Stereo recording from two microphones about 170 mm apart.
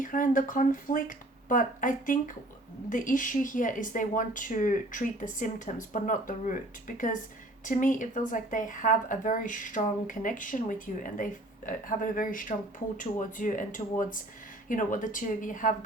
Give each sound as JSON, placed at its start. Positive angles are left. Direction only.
{"t": 0.0, "sound": "a woman's voice", "side_deg": 50}